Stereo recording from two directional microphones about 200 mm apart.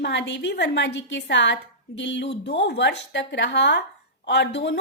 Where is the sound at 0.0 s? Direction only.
60° left (ahead or behind).